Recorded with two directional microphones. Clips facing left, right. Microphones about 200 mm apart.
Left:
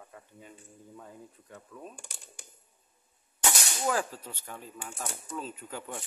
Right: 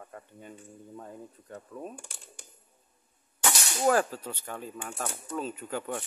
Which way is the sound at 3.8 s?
55° right (ahead or behind).